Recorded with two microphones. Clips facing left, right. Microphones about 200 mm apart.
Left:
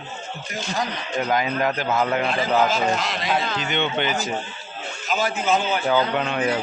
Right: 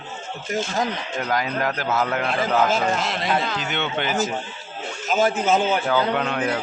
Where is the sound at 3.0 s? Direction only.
50° right (ahead or behind).